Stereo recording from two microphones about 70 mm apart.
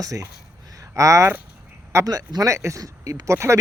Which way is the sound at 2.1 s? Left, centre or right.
Right.